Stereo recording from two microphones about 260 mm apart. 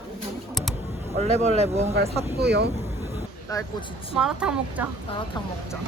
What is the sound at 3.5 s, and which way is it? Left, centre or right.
Speech, centre.